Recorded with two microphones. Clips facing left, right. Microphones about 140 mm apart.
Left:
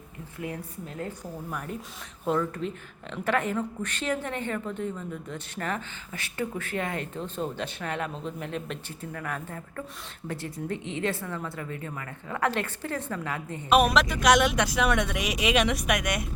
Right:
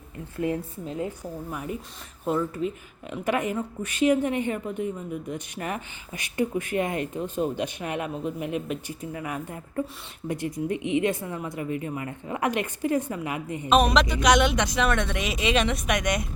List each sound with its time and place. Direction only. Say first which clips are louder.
0.3 s a woman's voice: right 8 dB; 30° right (ahead or behind)
0.9 s a woman's voice: right 4 dB; 15° right (ahead or behind)
13.7 s speech: right 1 dB; 5° left (ahead or behind)